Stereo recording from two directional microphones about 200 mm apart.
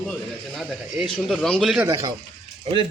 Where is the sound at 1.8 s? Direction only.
15° right (ahead or behind).